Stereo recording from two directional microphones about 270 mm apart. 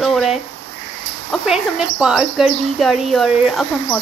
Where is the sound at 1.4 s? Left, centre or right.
Centre.